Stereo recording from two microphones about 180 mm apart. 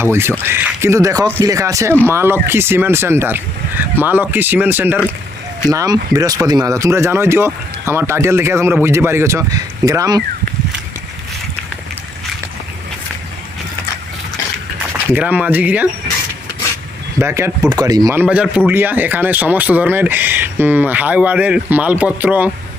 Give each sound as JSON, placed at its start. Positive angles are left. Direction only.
{"t": 0.0, "sound": "speech", "side_deg": -15}
{"t": 15.1, "sound": "speech", "side_deg": -10}
{"t": 17.2, "sound": "speech", "side_deg": -15}